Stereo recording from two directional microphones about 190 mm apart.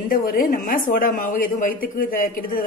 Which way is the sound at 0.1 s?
50° left (ahead or behind).